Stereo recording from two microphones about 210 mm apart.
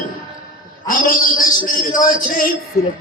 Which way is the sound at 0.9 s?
40° left (ahead or behind).